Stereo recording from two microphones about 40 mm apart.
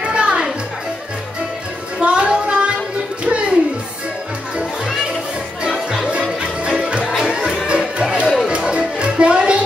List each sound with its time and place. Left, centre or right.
0.1 s music: right
2.0 s a sound: right
3.3 s music: right
6.8 s music: right
7.2 s music: centre
7.6 s music: right